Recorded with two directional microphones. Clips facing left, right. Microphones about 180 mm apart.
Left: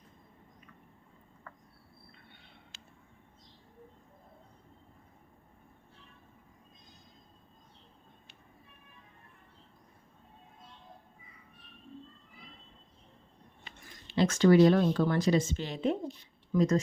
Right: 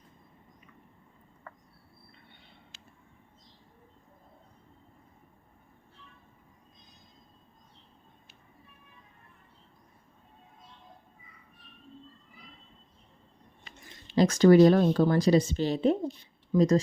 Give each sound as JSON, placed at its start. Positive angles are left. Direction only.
{"t": 14.2, "sound": "speech", "side_deg": -40}